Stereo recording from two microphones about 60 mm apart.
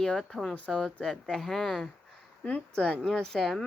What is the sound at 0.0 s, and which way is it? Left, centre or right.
Speech, centre.